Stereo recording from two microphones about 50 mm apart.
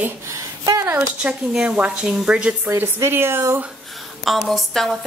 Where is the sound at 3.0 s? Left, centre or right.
Right.